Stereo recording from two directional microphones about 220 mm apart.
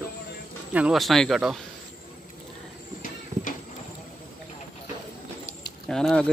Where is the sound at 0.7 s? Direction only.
Centre (ahead or behind).